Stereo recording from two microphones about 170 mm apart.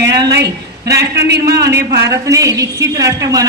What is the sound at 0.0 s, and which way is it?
A woman's voice, 25° right (ahead or behind).